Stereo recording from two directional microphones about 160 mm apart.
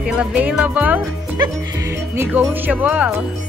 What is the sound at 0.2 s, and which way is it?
Speech, 10° right (ahead or behind).